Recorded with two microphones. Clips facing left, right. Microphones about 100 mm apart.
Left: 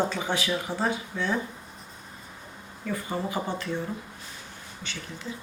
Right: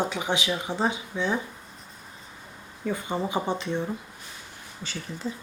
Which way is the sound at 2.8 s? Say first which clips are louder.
Right 2 dB; 20° right (ahead or behind).